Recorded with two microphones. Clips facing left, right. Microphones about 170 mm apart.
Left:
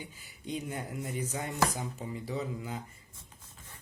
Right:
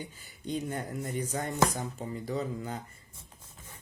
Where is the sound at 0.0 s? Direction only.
10° left (ahead or behind).